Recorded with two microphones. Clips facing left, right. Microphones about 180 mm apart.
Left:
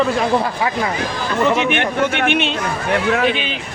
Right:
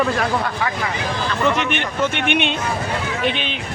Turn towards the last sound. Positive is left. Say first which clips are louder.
# left 5 dB
turn(degrees=5)  # may be behind; listen again after turning